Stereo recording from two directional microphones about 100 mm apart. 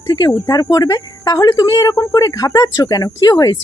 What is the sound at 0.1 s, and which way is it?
Speech, 40° left (ahead or behind).